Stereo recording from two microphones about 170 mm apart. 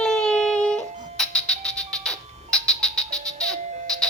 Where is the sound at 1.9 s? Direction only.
5° left (ahead or behind).